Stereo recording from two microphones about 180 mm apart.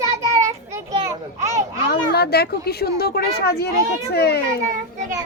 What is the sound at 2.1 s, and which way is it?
Speech, 65° left (ahead or behind).